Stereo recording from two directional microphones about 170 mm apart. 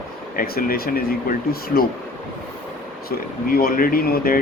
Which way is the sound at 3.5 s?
60° left (ahead or behind).